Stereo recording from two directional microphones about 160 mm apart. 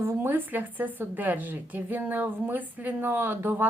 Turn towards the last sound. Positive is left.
turn(degrees=-15)  # may be behind; listen again after turning